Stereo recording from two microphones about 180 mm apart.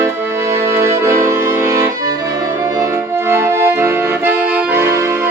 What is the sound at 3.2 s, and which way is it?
Accordion, 15° right (ahead or behind).